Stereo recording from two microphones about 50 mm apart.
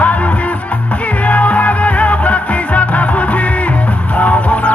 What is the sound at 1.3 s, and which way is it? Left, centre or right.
Music, left.